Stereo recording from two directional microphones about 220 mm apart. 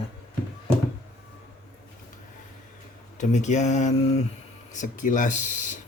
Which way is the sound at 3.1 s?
30° left (ahead or behind).